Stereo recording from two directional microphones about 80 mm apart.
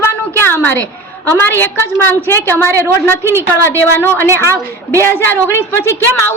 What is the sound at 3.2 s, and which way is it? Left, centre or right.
Speech, right.